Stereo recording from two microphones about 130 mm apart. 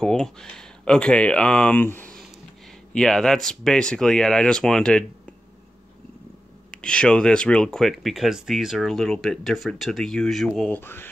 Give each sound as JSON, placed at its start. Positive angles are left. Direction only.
{"t": 0.0, "sound": "speech", "side_deg": 5}
{"t": 6.7, "sound": "speech", "side_deg": 5}
{"t": 10.8, "sound": "speech", "side_deg": 15}